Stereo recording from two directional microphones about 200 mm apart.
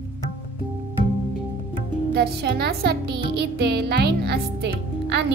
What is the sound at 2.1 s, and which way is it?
A woman's voice, 55° right (ahead or behind).